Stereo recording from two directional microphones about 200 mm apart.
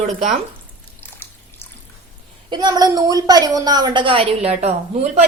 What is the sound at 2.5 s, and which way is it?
A woman's voice, 20° right (ahead or behind).